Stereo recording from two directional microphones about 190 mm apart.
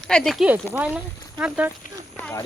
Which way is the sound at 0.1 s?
5° left (ahead or behind).